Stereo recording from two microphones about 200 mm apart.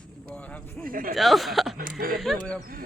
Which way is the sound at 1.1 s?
Centre (ahead or behind).